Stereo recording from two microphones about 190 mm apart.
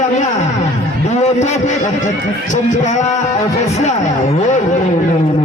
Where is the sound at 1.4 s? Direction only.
40° left (ahead or behind).